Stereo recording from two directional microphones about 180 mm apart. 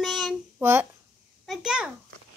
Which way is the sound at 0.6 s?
15° right (ahead or behind).